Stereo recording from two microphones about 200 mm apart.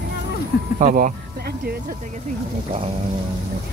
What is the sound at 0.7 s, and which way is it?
Speech, 40° right (ahead or behind).